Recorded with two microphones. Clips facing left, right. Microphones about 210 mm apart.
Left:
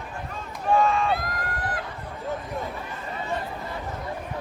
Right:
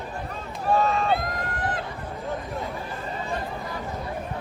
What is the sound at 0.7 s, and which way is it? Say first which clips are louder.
Run: left 1 dB; 40° right (ahead or behind).